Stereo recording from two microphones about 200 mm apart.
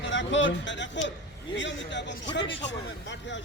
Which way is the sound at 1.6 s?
60° left (ahead or behind).